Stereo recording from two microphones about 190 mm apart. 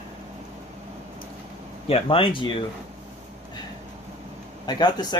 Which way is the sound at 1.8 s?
30° left (ahead or behind).